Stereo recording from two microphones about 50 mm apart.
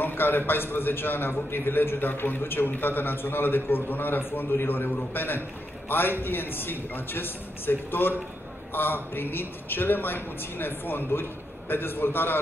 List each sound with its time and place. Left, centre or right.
0.0 s a man's voice: left